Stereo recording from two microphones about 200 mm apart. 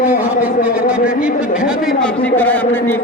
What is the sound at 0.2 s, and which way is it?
Speech, 5° right (ahead or behind).